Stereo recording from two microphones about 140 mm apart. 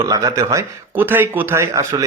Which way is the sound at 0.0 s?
25° right (ahead or behind).